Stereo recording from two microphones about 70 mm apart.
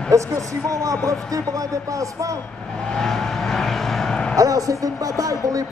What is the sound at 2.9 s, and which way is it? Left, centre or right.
Vehicle, centre.